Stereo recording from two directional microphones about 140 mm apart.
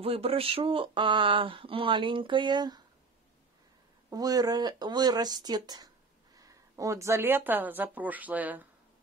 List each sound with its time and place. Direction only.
0.0 s speech: 45° right (ahead or behind)
4.1 s speech: 25° right (ahead or behind); by 8.6 s 10° right (ahead or behind)